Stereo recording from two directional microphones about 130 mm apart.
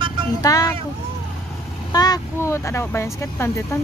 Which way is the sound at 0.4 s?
25° left (ahead or behind).